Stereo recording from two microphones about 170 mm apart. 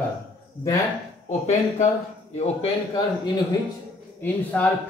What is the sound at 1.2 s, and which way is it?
Speech, 45° left (ahead or behind).